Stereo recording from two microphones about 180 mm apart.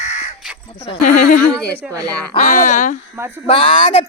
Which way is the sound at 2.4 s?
40° left (ahead or behind).